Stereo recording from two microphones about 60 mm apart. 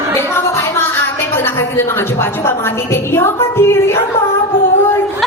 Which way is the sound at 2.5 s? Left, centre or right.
Left.